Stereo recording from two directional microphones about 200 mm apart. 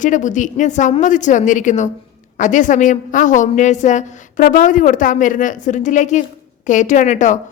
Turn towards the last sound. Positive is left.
turn(degrees=35)  # may be behind; listen again after turning